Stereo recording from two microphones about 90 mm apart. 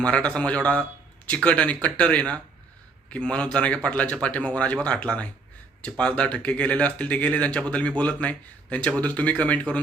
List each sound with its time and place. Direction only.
0.0 s speech: 10° left (ahead or behind)